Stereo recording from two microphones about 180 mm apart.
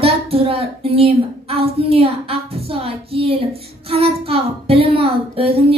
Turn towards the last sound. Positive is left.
turn(degrees=-35)  # may be behind; listen again after turning